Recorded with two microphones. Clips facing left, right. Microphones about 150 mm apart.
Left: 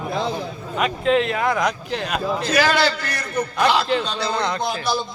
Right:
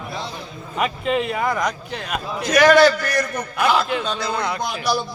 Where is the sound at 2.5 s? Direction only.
30° left (ahead or behind).